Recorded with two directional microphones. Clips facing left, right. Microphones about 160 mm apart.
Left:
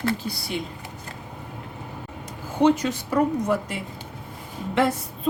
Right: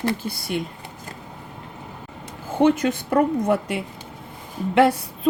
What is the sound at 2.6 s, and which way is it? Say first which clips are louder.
Speech: right 1 dB; 55° right (ahead or behind).